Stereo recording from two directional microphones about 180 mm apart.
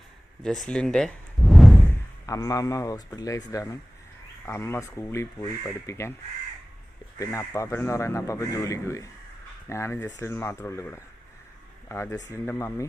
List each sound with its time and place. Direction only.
0.4 s speech: centre (ahead or behind)
1.9 s speech: 20° left (ahead or behind)
7.2 s speech: 15° left (ahead or behind)